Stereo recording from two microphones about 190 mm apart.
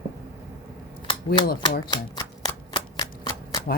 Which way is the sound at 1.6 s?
20° left (ahead or behind).